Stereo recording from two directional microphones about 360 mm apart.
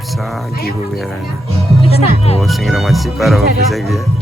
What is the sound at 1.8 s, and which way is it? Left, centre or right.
Speech, centre.